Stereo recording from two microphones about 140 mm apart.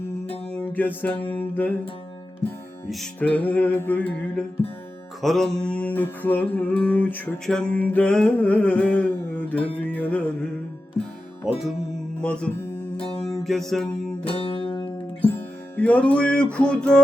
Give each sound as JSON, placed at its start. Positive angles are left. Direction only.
{"t": 0.4, "sound": "music", "side_deg": 10}
{"t": 1.3, "sound": "mantra", "side_deg": 10}
{"t": 2.9, "sound": "mantra", "side_deg": 5}
{"t": 11.4, "sound": "music", "side_deg": 0}
{"t": 12.2, "sound": "mantra", "side_deg": 5}
{"t": 13.2, "sound": "music", "side_deg": 0}
{"t": 14.3, "sound": "music", "side_deg": 40}
{"t": 15.3, "sound": "music", "side_deg": 10}